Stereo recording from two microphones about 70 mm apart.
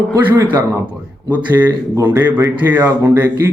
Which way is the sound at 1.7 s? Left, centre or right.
Right.